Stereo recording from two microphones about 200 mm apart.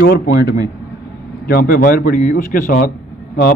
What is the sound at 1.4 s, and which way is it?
A man's voice, 45° left (ahead or behind).